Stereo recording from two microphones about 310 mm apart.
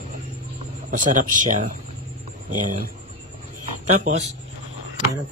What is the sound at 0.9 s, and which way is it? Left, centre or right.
Speech, right.